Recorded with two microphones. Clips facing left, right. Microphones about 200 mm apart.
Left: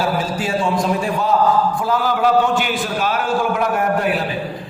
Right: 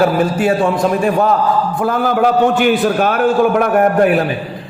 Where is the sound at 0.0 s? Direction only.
60° right (ahead or behind).